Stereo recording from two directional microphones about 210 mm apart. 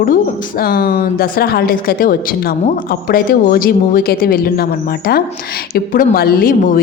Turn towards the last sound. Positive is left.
turn(degrees=40)  # may be behind; listen again after turning